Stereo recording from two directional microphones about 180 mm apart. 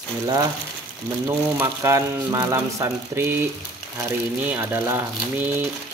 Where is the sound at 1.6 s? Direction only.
15° right (ahead or behind).